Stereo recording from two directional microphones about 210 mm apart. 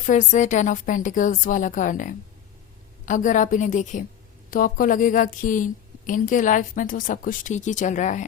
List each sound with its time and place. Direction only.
0.0 s a woman's voice: 35° left (ahead or behind)